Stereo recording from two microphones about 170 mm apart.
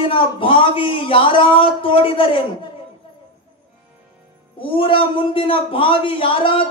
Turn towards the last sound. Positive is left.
turn(degrees=30)  # may be behind; listen again after turning